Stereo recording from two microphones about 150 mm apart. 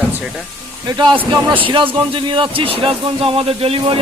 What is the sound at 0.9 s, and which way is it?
A man's voice, 30° right (ahead or behind).